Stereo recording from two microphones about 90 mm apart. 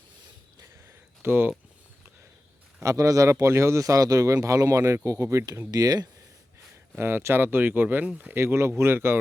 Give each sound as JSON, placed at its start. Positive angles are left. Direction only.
{"t": 0.9, "sound": "a sound", "side_deg": -25}
{"t": 2.8, "sound": "a man's voice", "side_deg": -35}
{"t": 5.7, "sound": "speech", "side_deg": -45}
{"t": 6.9, "sound": "speech", "side_deg": -25}
{"t": 8.3, "sound": "speech", "side_deg": -25}